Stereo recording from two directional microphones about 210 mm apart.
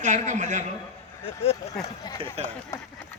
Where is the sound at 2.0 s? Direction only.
15° left (ahead or behind).